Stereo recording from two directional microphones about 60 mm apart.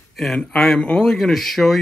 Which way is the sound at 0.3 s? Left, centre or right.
Centre.